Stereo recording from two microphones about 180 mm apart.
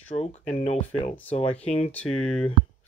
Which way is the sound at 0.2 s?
40° left (ahead or behind).